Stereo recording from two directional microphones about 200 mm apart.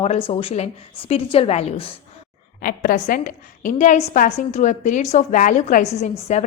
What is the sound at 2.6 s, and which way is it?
A woman's voice, 45° left (ahead or behind).